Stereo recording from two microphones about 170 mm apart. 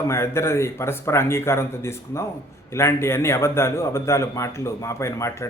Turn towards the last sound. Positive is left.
turn(degrees=15)  # may be behind; listen again after turning